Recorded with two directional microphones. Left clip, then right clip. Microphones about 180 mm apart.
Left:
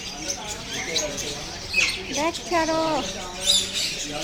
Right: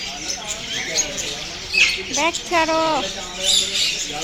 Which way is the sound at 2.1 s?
Centre (ahead or behind).